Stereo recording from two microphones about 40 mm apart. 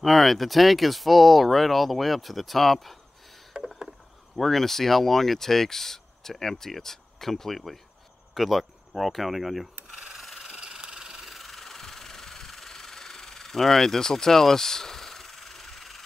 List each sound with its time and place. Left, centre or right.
0.0 s speech: centre
3.6 s rowboat: right
4.4 s speech: centre
10.1 s a sound: centre
10.5 s a sound: centre
11.2 s engine: centre